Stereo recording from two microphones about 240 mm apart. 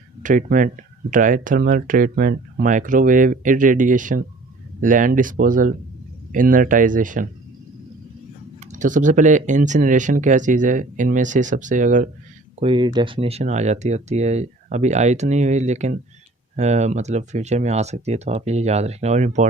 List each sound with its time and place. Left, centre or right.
0.2 s speech: right
8.6 s speech: right
12.5 s speech: right